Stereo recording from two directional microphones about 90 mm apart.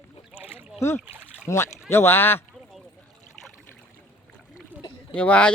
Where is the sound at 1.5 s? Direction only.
30° left (ahead or behind).